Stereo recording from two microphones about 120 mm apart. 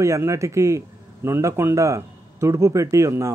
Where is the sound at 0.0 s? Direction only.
25° right (ahead or behind).